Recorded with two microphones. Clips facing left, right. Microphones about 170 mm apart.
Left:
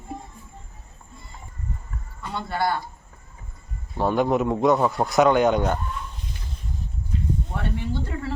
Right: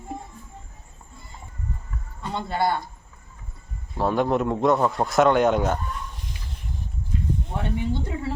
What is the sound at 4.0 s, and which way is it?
A man's voice, centre (ahead or behind).